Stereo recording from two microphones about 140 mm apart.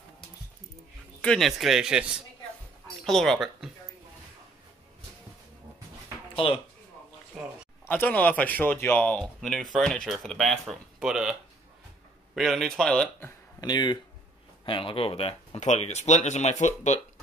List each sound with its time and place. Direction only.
1.2 s speech: 5° left (ahead or behind)
6.3 s speech: 40° left (ahead or behind)
7.4 s speech: 5° right (ahead or behind)
7.8 s speech: 15° left (ahead or behind); by 11.3 s 5° right (ahead or behind)
12.4 s speech: centre (ahead or behind)
13.6 s speech: 30° left (ahead or behind); by 17.0 s 55° left (ahead or behind)